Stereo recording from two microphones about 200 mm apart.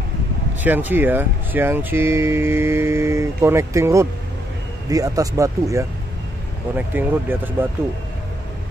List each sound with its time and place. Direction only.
0.6 s speech: 10° right (ahead or behind)